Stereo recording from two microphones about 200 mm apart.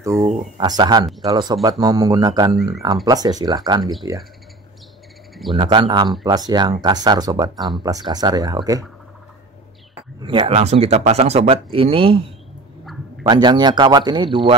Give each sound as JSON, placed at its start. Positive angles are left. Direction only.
{"t": 0.1, "sound": "speech", "side_deg": 0}
{"t": 0.6, "sound": "speech", "side_deg": -20}
{"t": 5.6, "sound": "speech", "side_deg": -25}
{"t": 10.2, "sound": "speech", "side_deg": -25}
{"t": 13.2, "sound": "speech", "side_deg": -20}